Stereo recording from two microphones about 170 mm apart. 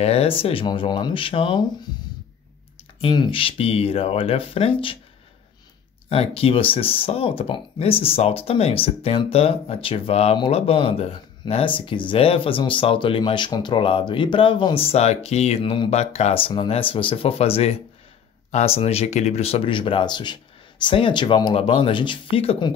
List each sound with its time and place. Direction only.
0.0 s speech: 35° left (ahead or behind)
3.0 s speech: 30° left (ahead or behind)
6.0 s speech: 35° left (ahead or behind)